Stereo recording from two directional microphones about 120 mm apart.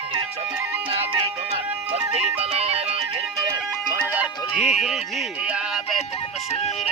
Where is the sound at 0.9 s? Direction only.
55° right (ahead or behind).